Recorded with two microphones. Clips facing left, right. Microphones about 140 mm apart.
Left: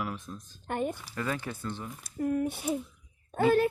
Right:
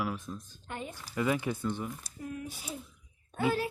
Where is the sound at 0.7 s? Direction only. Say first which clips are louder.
Left 9 dB; 55° left (ahead or behind).